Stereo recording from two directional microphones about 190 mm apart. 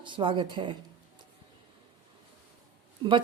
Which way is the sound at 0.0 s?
25° right (ahead or behind).